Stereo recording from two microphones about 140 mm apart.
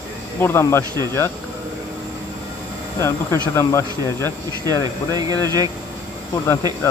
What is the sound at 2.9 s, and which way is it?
Speech, 20° left (ahead or behind).